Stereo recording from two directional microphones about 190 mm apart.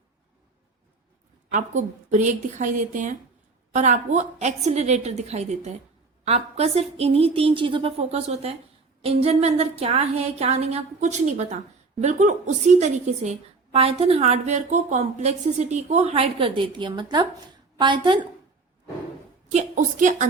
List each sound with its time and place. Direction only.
1.5 s a woman's voice: 40° right (ahead or behind)
19.5 s a woman's voice: 40° right (ahead or behind)